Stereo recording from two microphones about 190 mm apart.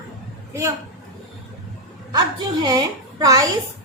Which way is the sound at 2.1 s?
20° right (ahead or behind).